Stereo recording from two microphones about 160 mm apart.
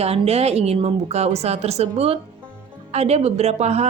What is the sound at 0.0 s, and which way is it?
Speech, 40° right (ahead or behind).